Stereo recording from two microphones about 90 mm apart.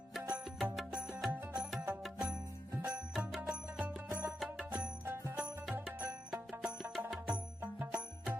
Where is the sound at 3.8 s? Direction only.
20° right (ahead or behind).